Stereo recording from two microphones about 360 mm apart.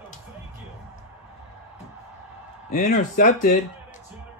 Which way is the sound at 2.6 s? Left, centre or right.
Left.